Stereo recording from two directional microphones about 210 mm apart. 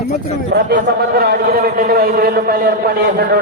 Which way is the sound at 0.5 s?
50° right (ahead or behind).